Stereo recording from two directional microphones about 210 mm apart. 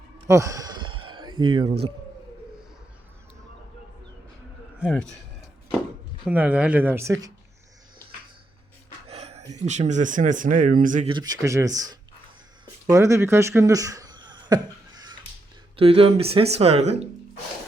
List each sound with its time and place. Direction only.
0.3 s a sound: 15° right (ahead or behind)
4.8 s speech: centre (ahead or behind)
6.2 s speech: 5° right (ahead or behind)
9.0 s speech: 30° right (ahead or behind)
11.1 s speech: 15° right (ahead or behind)
12.9 s a sound: 15° right (ahead or behind)
15.7 s speech: 25° right (ahead or behind)